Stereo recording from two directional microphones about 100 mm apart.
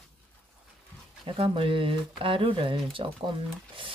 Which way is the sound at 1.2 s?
70° right (ahead or behind).